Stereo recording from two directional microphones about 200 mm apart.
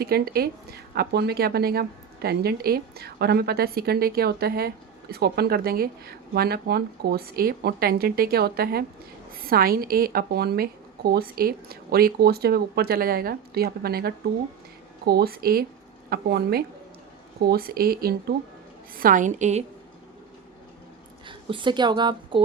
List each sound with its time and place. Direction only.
0.0 s a woman's voice: 50° right (ahead or behind)
21.2 s a woman's voice: 25° right (ahead or behind)